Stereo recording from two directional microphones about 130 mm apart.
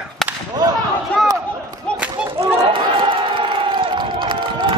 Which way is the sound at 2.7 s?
40° right (ahead or behind).